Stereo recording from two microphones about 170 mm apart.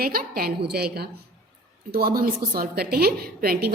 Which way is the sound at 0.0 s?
60° right (ahead or behind).